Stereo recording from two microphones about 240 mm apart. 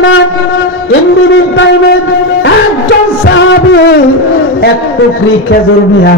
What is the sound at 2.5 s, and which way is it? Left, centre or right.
Music, left.